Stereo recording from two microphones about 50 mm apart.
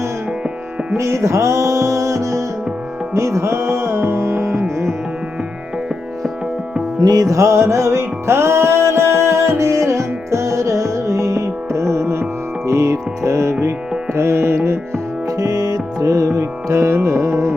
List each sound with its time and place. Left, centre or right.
0.9 s music: right
3.1 s music: right
7.3 s music: right
12.6 s music: right
16.0 s music: right